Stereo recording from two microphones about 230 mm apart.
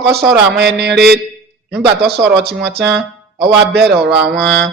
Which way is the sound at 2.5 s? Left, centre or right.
Right.